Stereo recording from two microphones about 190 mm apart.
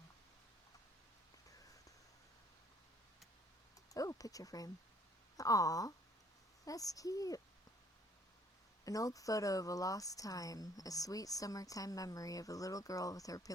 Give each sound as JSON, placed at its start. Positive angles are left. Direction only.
{"t": 3.9, "sound": "speech", "side_deg": 20}
{"t": 8.8, "sound": "speech", "side_deg": 20}